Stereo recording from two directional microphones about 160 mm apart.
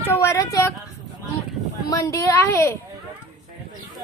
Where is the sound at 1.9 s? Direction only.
20° left (ahead or behind).